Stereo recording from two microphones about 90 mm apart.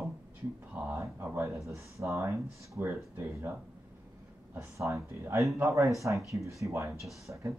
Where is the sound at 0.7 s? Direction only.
20° right (ahead or behind).